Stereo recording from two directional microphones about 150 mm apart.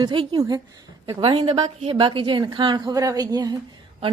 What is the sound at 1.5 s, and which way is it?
A woman's voice, 45° right (ahead or behind).